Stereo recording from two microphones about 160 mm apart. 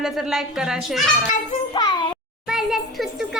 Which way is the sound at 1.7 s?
30° left (ahead or behind).